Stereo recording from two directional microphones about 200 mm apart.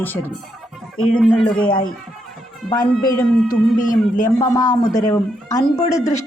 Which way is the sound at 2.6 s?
20° left (ahead or behind).